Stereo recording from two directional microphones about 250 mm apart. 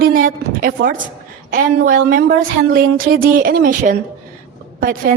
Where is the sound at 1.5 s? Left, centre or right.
Right.